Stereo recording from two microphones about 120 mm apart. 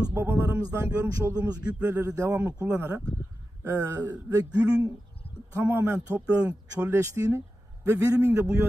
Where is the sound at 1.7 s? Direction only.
15° right (ahead or behind).